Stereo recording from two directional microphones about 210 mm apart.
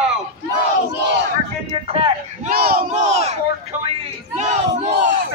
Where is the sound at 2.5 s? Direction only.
45° right (ahead or behind).